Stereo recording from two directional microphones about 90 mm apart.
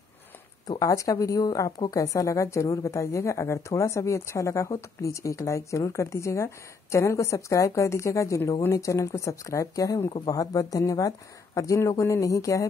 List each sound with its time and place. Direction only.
0.7 s a woman's voice: 40° left (ahead or behind)